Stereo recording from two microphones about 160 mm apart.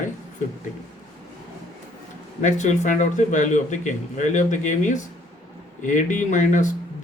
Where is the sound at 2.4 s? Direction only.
50° left (ahead or behind).